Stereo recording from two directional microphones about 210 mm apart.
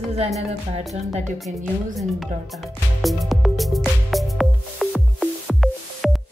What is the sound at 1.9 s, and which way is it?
Music, centre (ahead or behind).